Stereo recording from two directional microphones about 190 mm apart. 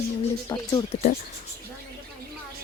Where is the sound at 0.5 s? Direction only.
20° left (ahead or behind).